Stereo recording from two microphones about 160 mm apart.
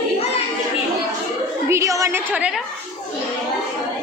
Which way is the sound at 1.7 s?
20° right (ahead or behind).